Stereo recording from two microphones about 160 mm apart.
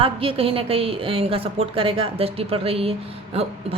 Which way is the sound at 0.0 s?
35° right (ahead or behind).